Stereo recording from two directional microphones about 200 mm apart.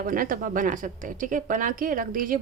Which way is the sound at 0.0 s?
45° right (ahead or behind).